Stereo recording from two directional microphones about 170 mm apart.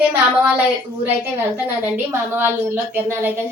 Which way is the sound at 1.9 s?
15° right (ahead or behind).